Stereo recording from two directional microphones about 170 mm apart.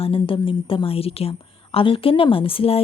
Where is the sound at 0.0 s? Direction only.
30° left (ahead or behind).